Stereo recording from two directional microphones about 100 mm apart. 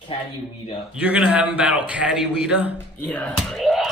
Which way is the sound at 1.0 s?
15° right (ahead or behind).